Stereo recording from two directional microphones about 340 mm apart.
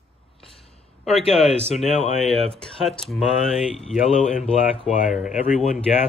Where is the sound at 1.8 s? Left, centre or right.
Centre.